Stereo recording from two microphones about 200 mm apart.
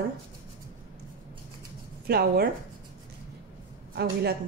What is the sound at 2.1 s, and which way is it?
Speech, 50° right (ahead or behind).